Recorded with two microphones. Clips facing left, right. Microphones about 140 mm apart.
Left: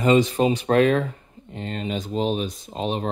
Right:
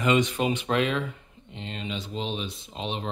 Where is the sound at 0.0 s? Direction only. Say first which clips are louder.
Left 6 dB; 35° left (ahead or behind).